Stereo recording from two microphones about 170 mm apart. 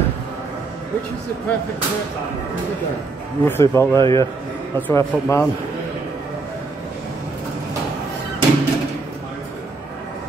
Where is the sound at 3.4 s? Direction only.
15° left (ahead or behind).